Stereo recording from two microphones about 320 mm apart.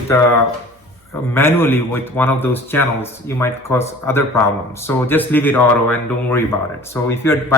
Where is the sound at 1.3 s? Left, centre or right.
Centre.